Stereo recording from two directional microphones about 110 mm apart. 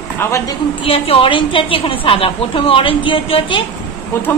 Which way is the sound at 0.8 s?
60° left (ahead or behind).